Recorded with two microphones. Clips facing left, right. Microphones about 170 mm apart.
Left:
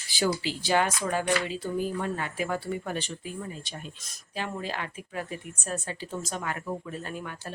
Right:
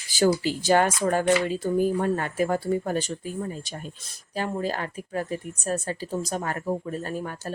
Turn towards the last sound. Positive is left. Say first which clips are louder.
# right 6 dB
turn(degrees=-40)  # may be behind; listen again after turning